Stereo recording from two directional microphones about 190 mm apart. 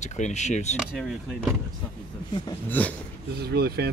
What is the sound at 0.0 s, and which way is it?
Speech, 35° left (ahead or behind).